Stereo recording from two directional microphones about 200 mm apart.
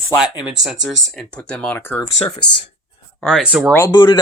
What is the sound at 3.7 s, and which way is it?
Speech, 20° left (ahead or behind).